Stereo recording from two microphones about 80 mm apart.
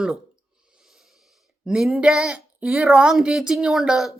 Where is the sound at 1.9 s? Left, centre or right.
Centre.